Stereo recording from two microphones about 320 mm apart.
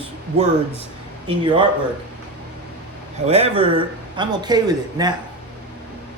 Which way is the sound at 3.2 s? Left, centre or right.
Centre.